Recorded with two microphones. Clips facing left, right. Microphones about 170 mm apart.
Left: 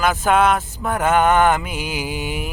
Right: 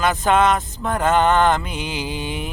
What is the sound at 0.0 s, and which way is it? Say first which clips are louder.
Speech: even; 5° left (ahead or behind).